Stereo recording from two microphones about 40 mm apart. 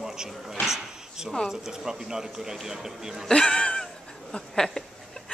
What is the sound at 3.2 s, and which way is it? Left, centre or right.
Speech, centre.